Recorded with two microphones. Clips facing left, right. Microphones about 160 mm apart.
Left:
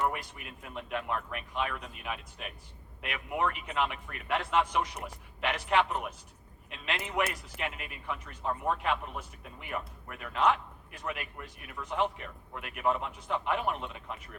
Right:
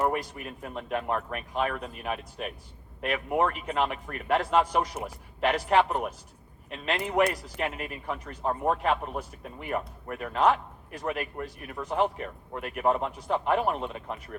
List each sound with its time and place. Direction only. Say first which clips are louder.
0.1 s a man's voice: right 8 dB; 40° right (ahead or behind)